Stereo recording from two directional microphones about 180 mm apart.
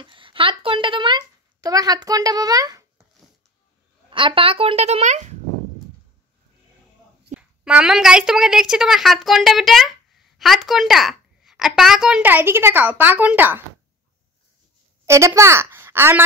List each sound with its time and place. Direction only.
0.0 s speech: 30° right (ahead or behind)
4.1 s speech: 30° right (ahead or behind)
7.3 s a woman's voice: 5° right (ahead or behind)
15.0 s a child's voice: 15° right (ahead or behind)